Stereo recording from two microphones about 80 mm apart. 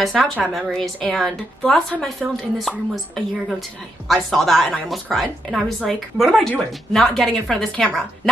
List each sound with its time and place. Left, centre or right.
0.0 s a woman's voice: centre